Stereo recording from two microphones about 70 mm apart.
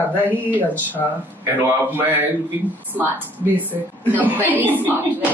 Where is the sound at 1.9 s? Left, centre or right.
Right.